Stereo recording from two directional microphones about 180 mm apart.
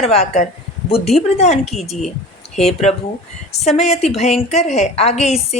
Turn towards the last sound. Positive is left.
turn(degrees=35)  # may be behind; listen again after turning